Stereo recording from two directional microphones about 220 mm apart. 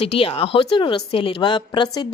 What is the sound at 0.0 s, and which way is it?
A woman's voice, 25° left (ahead or behind).